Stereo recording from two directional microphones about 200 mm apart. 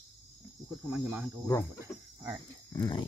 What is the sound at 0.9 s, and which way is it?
Speech, 10° right (ahead or behind).